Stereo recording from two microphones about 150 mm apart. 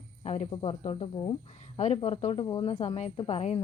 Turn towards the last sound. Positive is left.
turn(degrees=45)  # may be behind; listen again after turning